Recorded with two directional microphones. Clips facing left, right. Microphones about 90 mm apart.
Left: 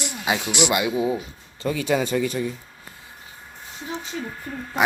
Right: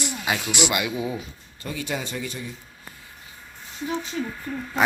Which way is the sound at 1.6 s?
90° left.